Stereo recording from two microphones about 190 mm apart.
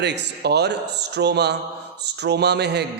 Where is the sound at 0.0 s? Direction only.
60° right (ahead or behind).